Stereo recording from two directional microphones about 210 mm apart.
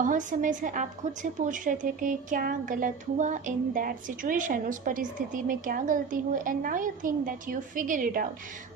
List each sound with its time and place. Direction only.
0.0 s a woman's voice: 40° right (ahead or behind)